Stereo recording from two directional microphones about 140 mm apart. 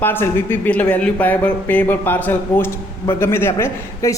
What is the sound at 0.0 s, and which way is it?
A man's voice, 15° left (ahead or behind).